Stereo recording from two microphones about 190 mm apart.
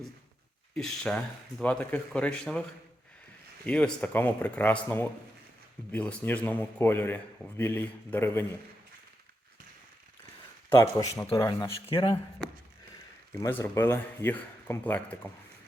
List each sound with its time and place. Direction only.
0.8 s speech: centre (ahead or behind)
3.7 s a man's voice: 5° left (ahead or behind)
10.7 s a man's voice: 15° left (ahead or behind)
13.3 s a man's voice: 10° left (ahead or behind)